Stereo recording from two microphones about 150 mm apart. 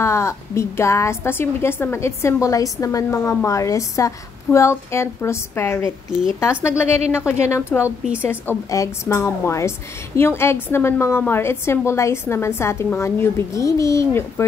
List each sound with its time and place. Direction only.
0.0 s a woman's voice: 20° left (ahead or behind)